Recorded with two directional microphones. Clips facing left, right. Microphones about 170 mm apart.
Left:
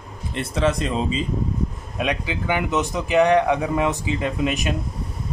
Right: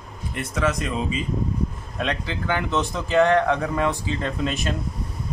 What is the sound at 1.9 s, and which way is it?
Speech, 15° left (ahead or behind).